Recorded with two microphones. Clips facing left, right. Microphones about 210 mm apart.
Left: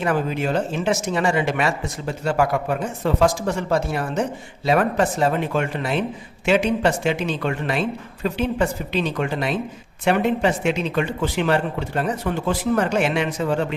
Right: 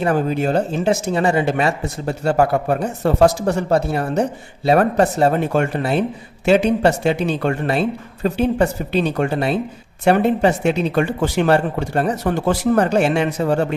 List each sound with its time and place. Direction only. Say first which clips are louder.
0.0 s a woman's voice: right 4 dB; 40° right (ahead or behind)
2.0 s a woman's voice: right 4 dB; 40° right (ahead or behind)